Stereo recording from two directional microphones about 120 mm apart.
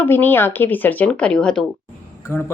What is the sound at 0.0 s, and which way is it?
A woman's voice, 15° left (ahead or behind).